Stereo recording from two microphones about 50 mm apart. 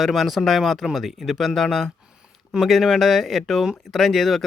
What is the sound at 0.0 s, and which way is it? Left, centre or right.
A man's voice, centre.